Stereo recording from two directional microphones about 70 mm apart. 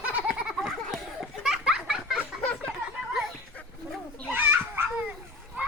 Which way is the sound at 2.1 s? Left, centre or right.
Left.